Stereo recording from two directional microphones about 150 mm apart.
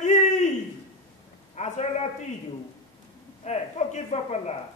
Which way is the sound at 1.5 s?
45° left (ahead or behind).